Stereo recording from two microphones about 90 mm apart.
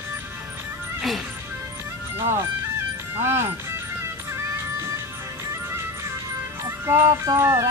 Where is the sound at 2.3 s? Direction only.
30° right (ahead or behind).